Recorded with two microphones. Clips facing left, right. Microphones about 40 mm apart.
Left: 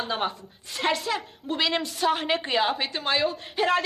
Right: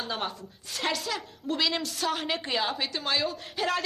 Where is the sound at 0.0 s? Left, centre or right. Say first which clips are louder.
Left 4 dB; centre.